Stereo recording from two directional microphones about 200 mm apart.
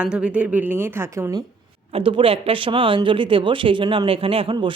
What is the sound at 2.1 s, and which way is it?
Speech, 25° right (ahead or behind).